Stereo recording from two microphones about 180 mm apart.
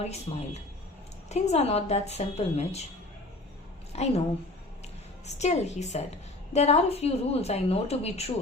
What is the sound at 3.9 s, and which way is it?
Speech, 35° left (ahead or behind).